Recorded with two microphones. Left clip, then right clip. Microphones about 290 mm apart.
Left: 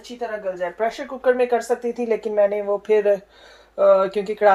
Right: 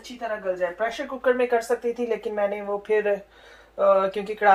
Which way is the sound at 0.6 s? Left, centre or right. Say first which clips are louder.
Left 2 dB; left.